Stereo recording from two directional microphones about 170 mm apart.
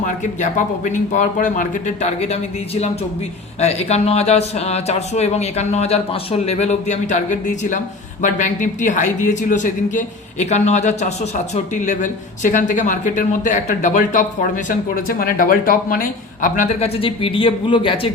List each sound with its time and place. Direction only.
0.0 s a woman's voice: 45° left (ahead or behind)
3.6 s a woman's voice: 40° left (ahead or behind)